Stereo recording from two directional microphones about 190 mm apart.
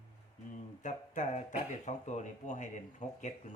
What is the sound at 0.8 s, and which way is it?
Speech, 40° left (ahead or behind).